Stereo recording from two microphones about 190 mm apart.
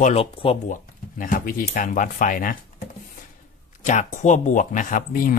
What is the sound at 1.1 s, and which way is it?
Speech, 45° left (ahead or behind).